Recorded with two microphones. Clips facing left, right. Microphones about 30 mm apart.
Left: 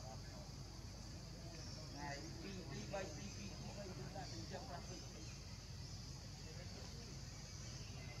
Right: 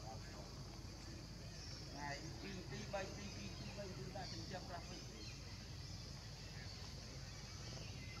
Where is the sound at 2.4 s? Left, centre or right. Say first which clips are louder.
Right 1 dB; centre.